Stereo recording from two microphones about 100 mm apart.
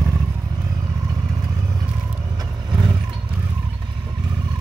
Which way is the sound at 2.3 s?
45° right (ahead or behind).